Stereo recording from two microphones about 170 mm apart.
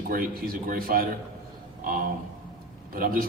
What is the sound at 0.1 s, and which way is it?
Speech, 60° right (ahead or behind).